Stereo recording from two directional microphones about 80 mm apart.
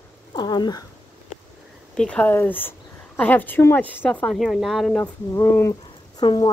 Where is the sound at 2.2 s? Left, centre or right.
Left.